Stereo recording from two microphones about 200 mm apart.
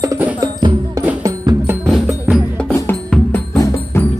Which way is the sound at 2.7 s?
10° left (ahead or behind).